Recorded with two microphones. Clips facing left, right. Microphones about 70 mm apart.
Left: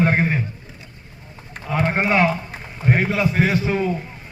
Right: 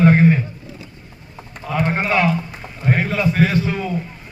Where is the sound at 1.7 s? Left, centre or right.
Left.